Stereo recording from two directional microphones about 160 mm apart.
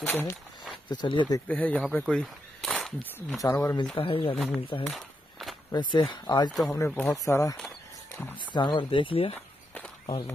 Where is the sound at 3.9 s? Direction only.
35° left (ahead or behind).